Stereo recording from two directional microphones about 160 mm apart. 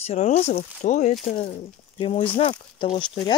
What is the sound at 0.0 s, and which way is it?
Speech, 40° left (ahead or behind).